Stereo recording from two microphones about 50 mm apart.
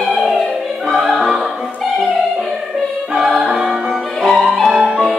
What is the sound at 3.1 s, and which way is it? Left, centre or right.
Music, centre.